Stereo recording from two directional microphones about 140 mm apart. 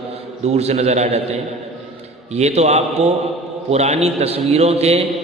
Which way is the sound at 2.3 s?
50° right (ahead or behind).